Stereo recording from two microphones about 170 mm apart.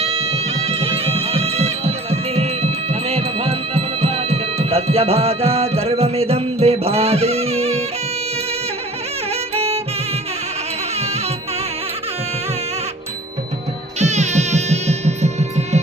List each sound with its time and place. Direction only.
0.0 s music: 35° right (ahead or behind)
9.3 s music: 35° right (ahead or behind)
10.9 s music: 40° right (ahead or behind)
14.0 s music: 40° right (ahead or behind)